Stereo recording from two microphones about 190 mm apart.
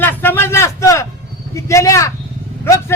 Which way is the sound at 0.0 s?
10° left (ahead or behind).